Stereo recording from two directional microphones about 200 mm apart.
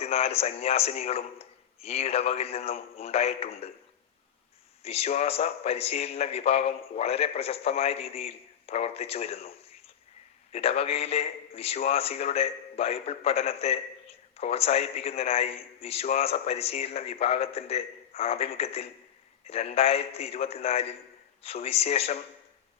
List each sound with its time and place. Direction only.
0.0 s a man's voice: 30° left (ahead or behind)
4.8 s a man's voice: 30° left (ahead or behind)
10.5 s a man's voice: 30° left (ahead or behind)